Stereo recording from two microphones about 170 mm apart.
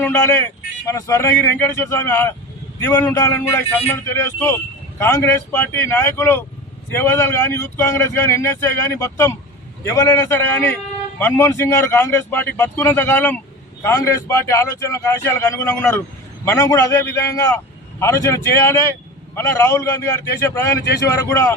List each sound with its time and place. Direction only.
0.0 s speech: 15° left (ahead or behind)